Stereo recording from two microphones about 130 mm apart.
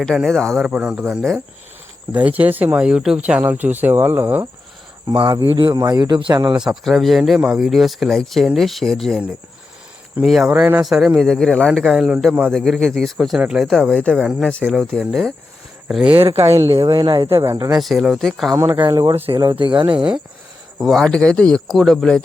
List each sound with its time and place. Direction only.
0.0 s speech: centre (ahead or behind)
2.1 s speech: 10° right (ahead or behind)
5.0 s speech: 40° right (ahead or behind)
6.6 s speech: centre (ahead or behind)
11.9 s speech: 5° right (ahead or behind)
12.5 s speech: centre (ahead or behind)
14.2 s speech: 5° right (ahead or behind)
16.0 s speech: 45° right (ahead or behind)
16.8 s speech: 30° right (ahead or behind)
17.2 s speech: 20° right (ahead or behind)
17.7 s speech: centre (ahead or behind)
18.5 s speech: 20° right (ahead or behind); by 20.1 s 35° right (ahead or behind)
20.7 s speech: centre (ahead or behind)